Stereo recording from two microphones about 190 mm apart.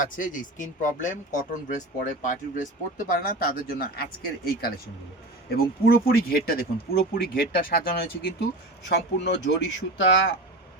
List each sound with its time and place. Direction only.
0.2 s speech: 45° left (ahead or behind)
5.5 s speech: 50° left (ahead or behind)
8.8 s speech: 65° left (ahead or behind)